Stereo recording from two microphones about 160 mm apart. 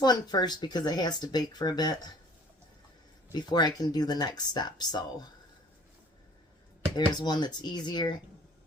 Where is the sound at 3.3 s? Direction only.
25° left (ahead or behind).